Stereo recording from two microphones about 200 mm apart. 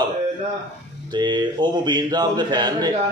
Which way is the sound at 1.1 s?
20° right (ahead or behind).